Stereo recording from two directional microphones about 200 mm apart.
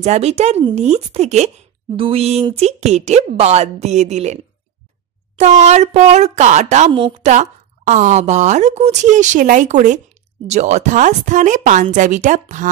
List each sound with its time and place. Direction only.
0.0 s a woman's voice: 30° right (ahead or behind)